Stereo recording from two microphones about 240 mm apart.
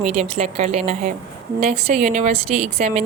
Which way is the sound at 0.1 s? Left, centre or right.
Right.